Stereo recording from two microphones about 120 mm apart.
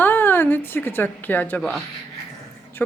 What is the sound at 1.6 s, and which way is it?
Speech, 5° left (ahead or behind).